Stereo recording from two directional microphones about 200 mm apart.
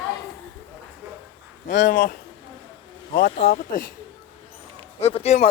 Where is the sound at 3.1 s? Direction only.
50° left (ahead or behind).